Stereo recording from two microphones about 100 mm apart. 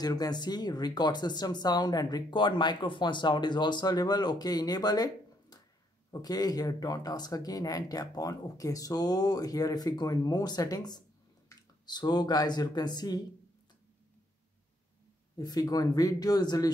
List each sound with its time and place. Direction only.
0.0 s speech: 40° left (ahead or behind)
15.3 s speech: 40° left (ahead or behind)